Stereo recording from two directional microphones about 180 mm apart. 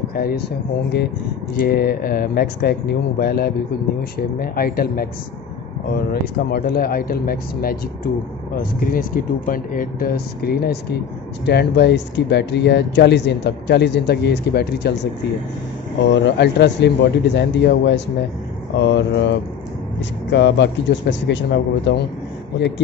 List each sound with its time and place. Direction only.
0.1 s speech: 55° left (ahead or behind)
1.6 s speech: 55° left (ahead or behind)
6.5 s speech: 60° left (ahead or behind)
8.7 s speech: 50° left (ahead or behind); by 15.0 s 65° left (ahead or behind)
16.1 s speech: 75° left (ahead or behind)